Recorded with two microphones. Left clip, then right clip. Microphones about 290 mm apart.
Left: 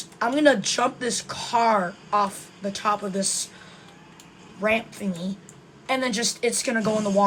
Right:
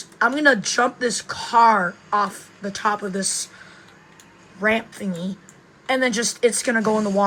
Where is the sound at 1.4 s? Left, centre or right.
Centre.